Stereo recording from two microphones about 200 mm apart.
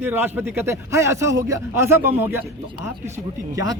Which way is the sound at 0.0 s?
10° right (ahead or behind).